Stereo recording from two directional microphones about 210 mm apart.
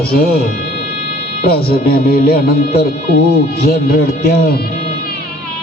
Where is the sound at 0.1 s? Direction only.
45° left (ahead or behind).